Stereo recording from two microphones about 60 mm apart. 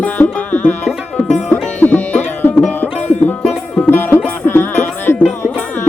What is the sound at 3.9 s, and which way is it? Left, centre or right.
Music, left.